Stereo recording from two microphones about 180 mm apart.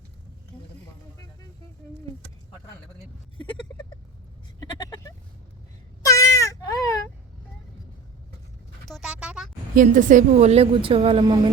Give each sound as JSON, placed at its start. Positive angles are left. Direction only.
{"t": 4.6, "sound": "vehicle", "side_deg": 20}
{"t": 6.0, "sound": "baby cry", "side_deg": 20}
{"t": 8.9, "sound": "a sound", "side_deg": -5}
{"t": 9.7, "sound": "a woman's voice", "side_deg": -45}